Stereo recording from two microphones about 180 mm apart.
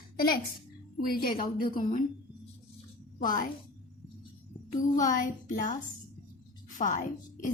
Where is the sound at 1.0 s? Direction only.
55° left (ahead or behind).